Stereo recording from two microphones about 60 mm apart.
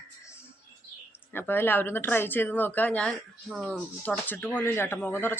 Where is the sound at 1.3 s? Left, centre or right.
Left.